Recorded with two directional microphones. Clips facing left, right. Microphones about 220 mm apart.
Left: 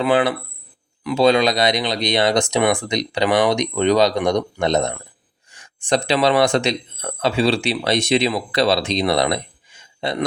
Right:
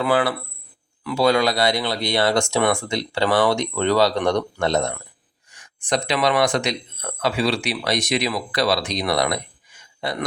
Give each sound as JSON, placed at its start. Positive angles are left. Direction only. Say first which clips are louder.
{"t": 0.0, "sound": "speech", "louder": "left 3 dB", "side_deg": 20}